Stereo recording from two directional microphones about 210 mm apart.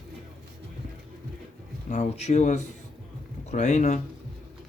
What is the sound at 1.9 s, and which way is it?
Speech, 35° left (ahead or behind).